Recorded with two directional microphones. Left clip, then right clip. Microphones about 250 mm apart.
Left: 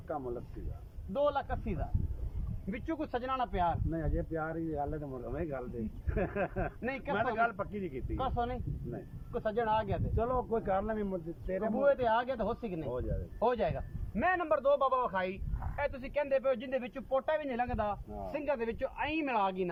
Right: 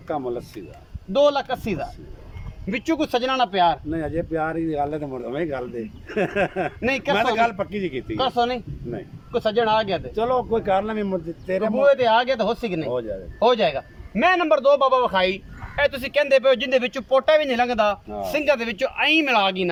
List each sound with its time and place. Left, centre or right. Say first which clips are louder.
0.1 s speech: right 12 dB; centre
15.7 s speech: right 14 dB; right